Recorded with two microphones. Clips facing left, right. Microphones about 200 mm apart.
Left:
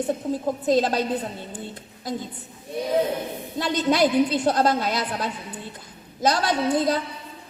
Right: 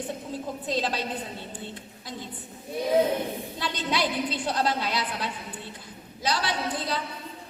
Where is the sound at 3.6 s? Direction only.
45° left (ahead or behind).